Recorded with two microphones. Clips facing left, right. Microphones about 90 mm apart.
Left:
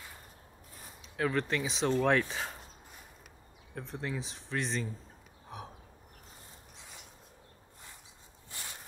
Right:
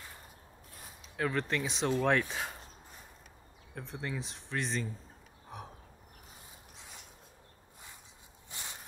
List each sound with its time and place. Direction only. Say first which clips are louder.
1.0 s speech: left 2 dB; centre (ahead or behind)
3.7 s speech: left 1 dB; centre (ahead or behind)
8.5 s a sound: even; 20° right (ahead or behind)